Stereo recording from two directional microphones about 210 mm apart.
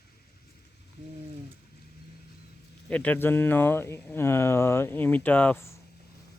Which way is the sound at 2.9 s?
5° left (ahead or behind).